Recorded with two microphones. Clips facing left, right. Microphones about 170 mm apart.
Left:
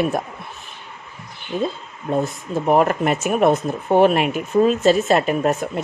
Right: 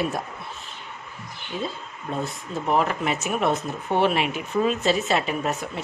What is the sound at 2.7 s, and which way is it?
Speech, 50° left (ahead or behind).